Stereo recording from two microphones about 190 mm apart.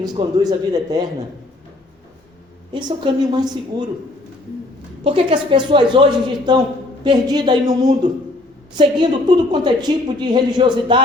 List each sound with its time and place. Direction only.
0.0 s a woman's voice: 20° right (ahead or behind)
2.7 s a woman's voice: 25° right (ahead or behind)
5.0 s a woman's voice: 25° right (ahead or behind)